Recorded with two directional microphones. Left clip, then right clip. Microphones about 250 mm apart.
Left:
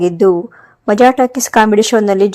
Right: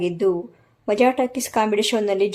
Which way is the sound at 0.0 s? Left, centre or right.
Left.